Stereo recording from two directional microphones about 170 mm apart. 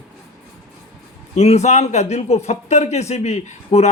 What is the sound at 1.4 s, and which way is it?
A man's voice, 40° left (ahead or behind).